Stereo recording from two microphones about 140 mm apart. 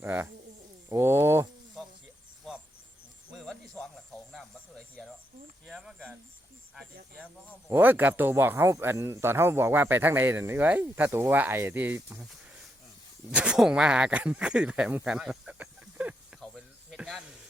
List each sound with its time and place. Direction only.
0.0 s speech: 15° right (ahead or behind)
0.9 s a sound: 20° right (ahead or behind)
3.3 s a sound: 5° left (ahead or behind)
5.6 s speech: centre (ahead or behind)
7.7 s speech: 15° right (ahead or behind)
13.3 s speech: 5° right (ahead or behind)
16.4 s snake: centre (ahead or behind)